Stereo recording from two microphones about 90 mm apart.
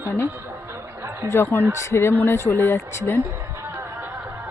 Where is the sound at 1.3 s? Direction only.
25° left (ahead or behind).